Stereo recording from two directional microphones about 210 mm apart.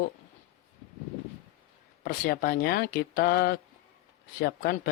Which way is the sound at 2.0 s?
45° left (ahead or behind).